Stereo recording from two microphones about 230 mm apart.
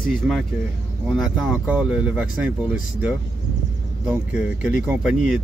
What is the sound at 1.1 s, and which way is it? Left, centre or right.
Speech, centre.